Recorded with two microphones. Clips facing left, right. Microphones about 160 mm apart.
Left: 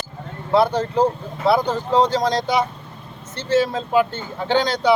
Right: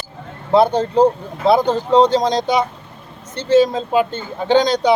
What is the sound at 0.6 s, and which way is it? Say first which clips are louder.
A man's voice: right 4 dB; 20° right (ahead or behind).